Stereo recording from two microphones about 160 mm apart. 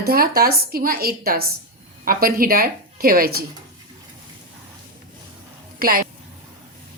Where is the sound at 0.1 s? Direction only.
70° right (ahead or behind).